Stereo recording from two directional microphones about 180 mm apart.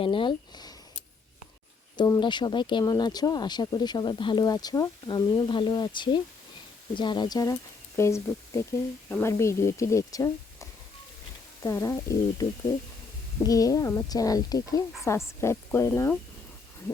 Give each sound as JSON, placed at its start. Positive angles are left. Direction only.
{"t": 0.0, "sound": "speech", "side_deg": 30}
{"t": 2.0, "sound": "speech", "side_deg": 25}